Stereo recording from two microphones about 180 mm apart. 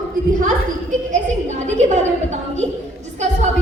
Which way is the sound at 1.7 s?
40° right (ahead or behind).